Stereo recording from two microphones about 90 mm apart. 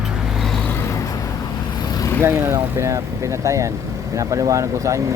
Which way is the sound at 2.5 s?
35° right (ahead or behind).